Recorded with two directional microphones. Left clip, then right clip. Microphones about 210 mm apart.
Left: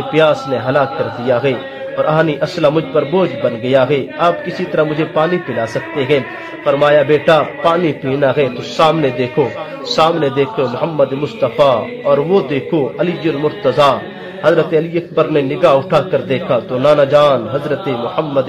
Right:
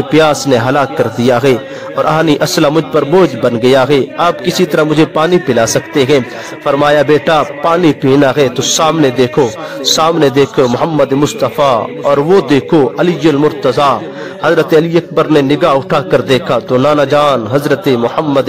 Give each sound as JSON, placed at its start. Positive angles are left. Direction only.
{"t": 0.1, "sound": "a man's voice", "side_deg": -60}
{"t": 2.0, "sound": "a man's voice", "side_deg": -55}